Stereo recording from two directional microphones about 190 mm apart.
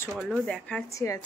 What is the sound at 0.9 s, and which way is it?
Speech, 15° left (ahead or behind).